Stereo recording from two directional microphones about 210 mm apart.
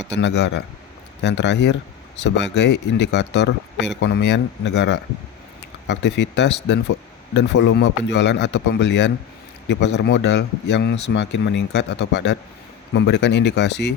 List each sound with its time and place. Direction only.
0.1 s speech: 55° left (ahead or behind)